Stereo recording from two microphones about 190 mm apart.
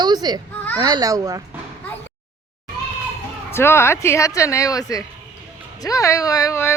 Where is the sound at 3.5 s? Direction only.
15° left (ahead or behind).